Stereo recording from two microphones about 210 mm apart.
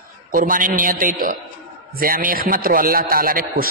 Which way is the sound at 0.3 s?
40° right (ahead or behind).